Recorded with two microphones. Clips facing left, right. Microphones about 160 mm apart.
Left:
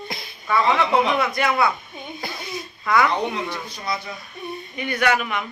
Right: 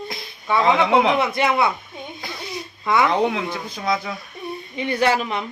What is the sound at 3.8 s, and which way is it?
Speech, 90° right.